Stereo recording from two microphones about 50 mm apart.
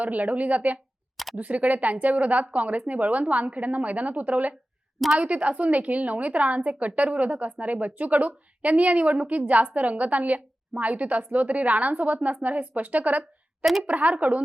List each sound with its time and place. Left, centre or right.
0.0 s a woman's voice: right
1.1 s camera: centre
1.4 s a woman's voice: right
4.9 s a woman's voice: centre
5.2 s a woman's voice: right